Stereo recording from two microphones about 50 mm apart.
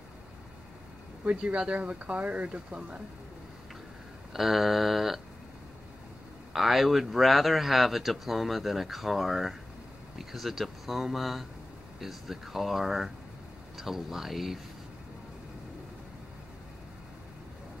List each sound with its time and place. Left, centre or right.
1.2 s speech: right
4.3 s speech: centre
6.5 s speech: centre